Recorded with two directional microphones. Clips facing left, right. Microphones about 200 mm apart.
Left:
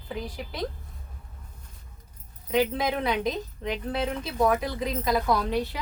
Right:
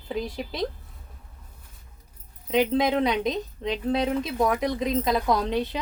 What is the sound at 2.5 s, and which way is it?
A woman's voice, 20° right (ahead or behind).